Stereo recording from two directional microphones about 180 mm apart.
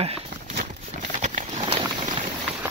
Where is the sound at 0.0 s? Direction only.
35° right (ahead or behind).